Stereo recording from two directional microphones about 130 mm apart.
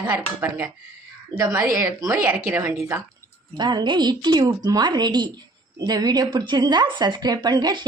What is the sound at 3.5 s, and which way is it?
A woman's voice, 35° right (ahead or behind).